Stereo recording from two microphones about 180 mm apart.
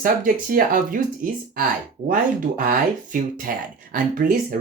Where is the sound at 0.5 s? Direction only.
50° right (ahead or behind).